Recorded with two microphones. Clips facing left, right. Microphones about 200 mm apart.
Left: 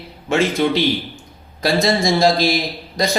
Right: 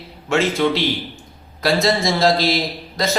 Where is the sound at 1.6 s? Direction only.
15° left (ahead or behind).